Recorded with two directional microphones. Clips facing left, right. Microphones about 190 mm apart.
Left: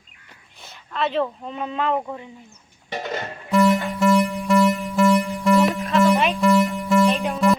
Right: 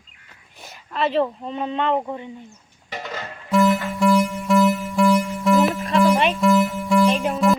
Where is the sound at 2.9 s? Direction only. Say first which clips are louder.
Left 4 dB; 25° left (ahead or behind).